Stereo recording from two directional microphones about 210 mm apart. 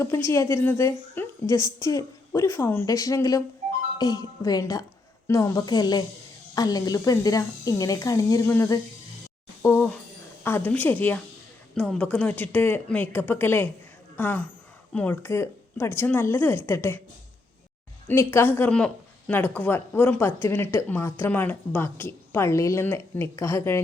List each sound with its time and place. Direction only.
0.3 s speech: 15° left (ahead or behind)
9.6 s a sound: 10° left (ahead or behind)
10.4 s speech: 10° left (ahead or behind)
18.1 s speech: 10° left (ahead or behind)